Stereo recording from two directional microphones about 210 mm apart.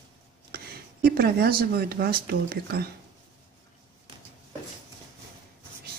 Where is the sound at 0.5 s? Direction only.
45° right (ahead or behind).